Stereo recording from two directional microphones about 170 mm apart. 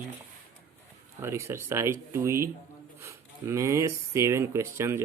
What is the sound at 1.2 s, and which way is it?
Speech, 15° right (ahead or behind).